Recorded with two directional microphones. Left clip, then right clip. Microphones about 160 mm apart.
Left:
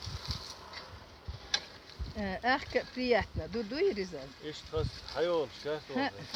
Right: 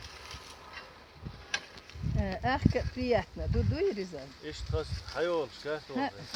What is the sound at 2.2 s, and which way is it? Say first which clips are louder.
Speech: even; 45° right (ahead or behind).